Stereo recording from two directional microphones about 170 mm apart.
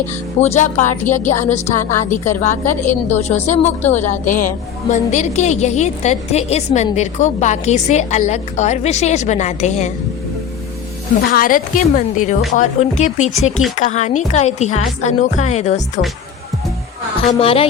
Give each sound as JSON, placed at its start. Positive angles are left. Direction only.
{"t": 0.3, "sound": "a woman's voice", "side_deg": 40}
{"t": 2.0, "sound": "a woman's voice", "side_deg": 15}
{"t": 2.4, "sound": "a woman's voice", "side_deg": 45}
{"t": 11.3, "sound": "a woman's voice", "side_deg": 55}
{"t": 17.4, "sound": "music", "side_deg": 35}